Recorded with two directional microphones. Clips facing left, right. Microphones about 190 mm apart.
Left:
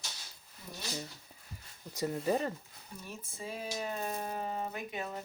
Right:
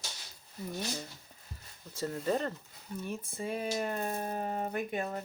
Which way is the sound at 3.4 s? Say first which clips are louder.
Right 5 dB; 55° right (ahead or behind).